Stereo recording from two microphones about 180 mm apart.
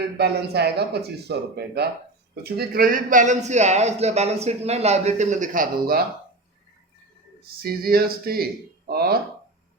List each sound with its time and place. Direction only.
0.2 s speech: 65° right (ahead or behind)
7.6 s speech: 55° right (ahead or behind)